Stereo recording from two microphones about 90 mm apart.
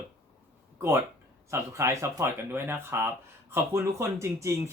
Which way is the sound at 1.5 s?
35° right (ahead or behind).